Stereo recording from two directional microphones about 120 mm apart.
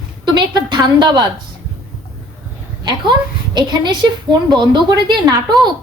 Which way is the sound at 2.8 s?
35° right (ahead or behind).